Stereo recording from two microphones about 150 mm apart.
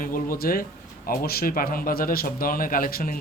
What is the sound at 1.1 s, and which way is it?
Speech, 90° left.